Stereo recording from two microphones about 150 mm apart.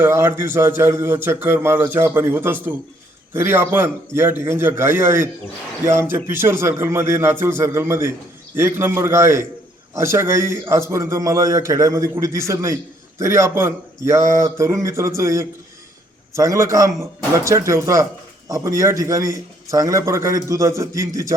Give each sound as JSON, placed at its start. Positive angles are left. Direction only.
{"t": 0.0, "sound": "a man's voice", "side_deg": -15}